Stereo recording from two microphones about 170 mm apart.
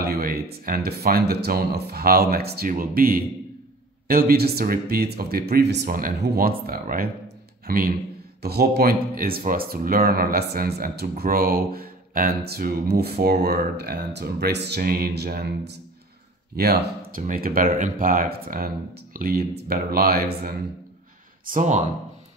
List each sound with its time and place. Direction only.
0.0 s a man's voice: 60° right (ahead or behind)
8.4 s speech: 70° right (ahead or behind)
21.5 s speech: 45° right (ahead or behind)